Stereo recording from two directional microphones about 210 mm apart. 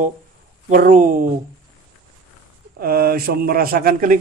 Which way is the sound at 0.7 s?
40° right (ahead or behind).